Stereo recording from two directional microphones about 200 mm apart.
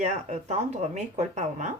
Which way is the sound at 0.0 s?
35° right (ahead or behind).